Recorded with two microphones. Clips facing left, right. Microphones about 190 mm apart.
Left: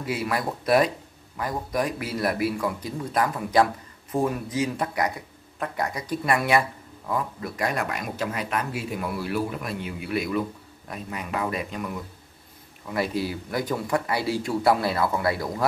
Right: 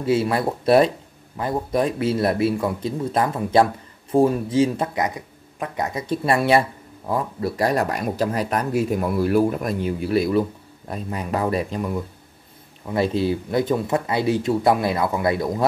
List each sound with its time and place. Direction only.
0.0 s speech: 30° right (ahead or behind)